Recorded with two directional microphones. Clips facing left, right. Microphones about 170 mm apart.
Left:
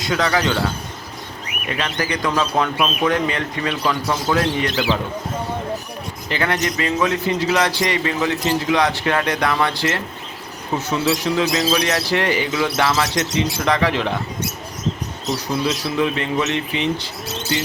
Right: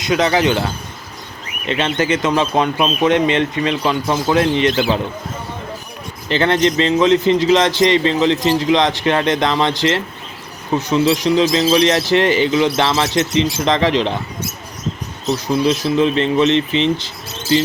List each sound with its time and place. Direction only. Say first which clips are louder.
0.0 s speech: right 4 dB; 20° right (ahead or behind)
1.6 s speech: right 6 dB; 25° right (ahead or behind)
6.2 s speech: right 7 dB; 25° right (ahead or behind)
15.8 s speech: right 5 dB; 25° right (ahead or behind)